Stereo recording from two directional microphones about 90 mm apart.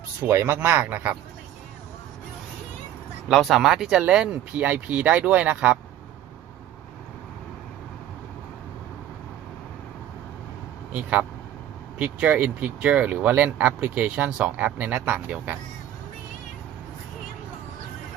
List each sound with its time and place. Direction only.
0.2 s speech: 25° right (ahead or behind)
3.2 s speech: centre (ahead or behind)
10.9 s speech: 15° right (ahead or behind)